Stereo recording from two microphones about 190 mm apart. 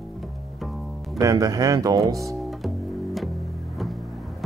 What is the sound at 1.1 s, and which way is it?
Speech, 20° right (ahead or behind).